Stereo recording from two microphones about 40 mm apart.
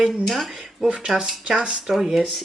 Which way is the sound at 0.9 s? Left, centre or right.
Right.